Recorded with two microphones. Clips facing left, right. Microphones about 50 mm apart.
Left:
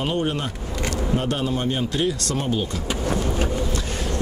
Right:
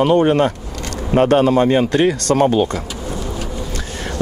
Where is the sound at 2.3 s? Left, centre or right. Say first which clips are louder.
Right 10 dB; right.